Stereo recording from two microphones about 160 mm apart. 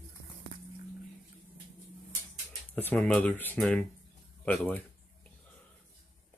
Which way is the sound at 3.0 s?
5° left (ahead or behind).